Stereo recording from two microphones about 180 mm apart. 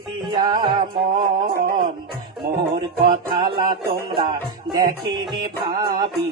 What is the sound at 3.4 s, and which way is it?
Music, 25° right (ahead or behind).